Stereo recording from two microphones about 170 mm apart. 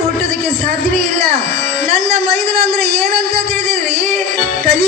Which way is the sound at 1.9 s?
40° right (ahead or behind).